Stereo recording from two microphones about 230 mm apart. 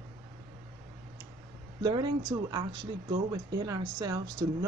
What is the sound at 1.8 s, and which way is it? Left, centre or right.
Speech, centre.